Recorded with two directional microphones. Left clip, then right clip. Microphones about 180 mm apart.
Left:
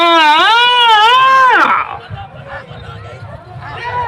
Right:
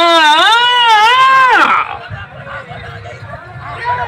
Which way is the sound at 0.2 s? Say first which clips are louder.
Even; 50° right (ahead or behind).